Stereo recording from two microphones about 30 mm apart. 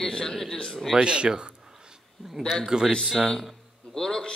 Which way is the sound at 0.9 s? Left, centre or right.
Right.